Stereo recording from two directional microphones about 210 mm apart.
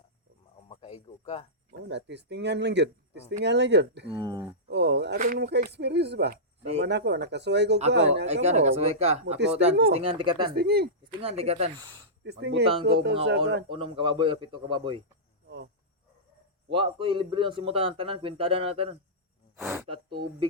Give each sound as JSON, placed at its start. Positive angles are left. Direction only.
{"t": 0.7, "sound": "speech", "side_deg": 30}
{"t": 1.9, "sound": "speech", "side_deg": -55}
{"t": 4.1, "sound": "speech", "side_deg": -20}
{"t": 4.7, "sound": "speech", "side_deg": -55}
{"t": 5.1, "sound": "speech", "side_deg": -40}
{"t": 8.3, "sound": "speech", "side_deg": -30}
{"t": 10.5, "sound": "speech", "side_deg": -45}
{"t": 11.0, "sound": "speech", "side_deg": -25}
{"t": 12.2, "sound": "speech", "side_deg": -55}
{"t": 13.7, "sound": "speech", "side_deg": -25}
{"t": 15.4, "sound": "cricket", "side_deg": -55}
{"t": 16.6, "sound": "speech", "side_deg": -25}
{"t": 19.5, "sound": "speech", "side_deg": -5}